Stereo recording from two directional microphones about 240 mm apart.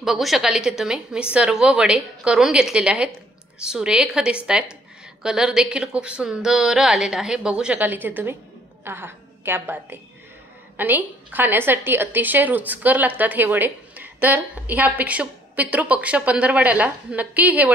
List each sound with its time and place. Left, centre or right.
0.0 s a woman's voice: centre